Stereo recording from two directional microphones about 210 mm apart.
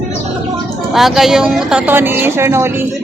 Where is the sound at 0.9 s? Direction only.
Centre (ahead or behind).